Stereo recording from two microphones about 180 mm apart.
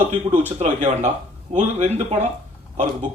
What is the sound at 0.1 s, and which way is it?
A man's voice, 35° right (ahead or behind).